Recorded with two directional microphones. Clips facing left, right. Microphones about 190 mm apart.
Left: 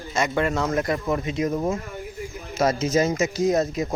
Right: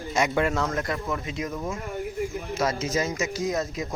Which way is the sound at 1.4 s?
40° left (ahead or behind).